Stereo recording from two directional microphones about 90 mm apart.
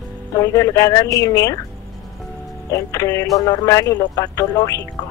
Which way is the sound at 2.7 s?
35° left (ahead or behind).